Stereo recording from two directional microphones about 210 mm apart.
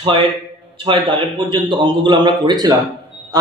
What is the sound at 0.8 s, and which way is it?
A man's voice, 25° right (ahead or behind).